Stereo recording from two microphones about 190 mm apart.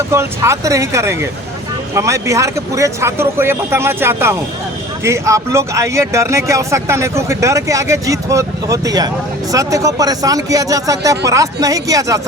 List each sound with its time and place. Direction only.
0.1 s speech: 15° right (ahead or behind)